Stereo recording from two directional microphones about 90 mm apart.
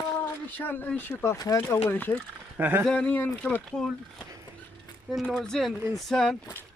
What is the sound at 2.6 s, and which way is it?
Speech, 20° right (ahead or behind).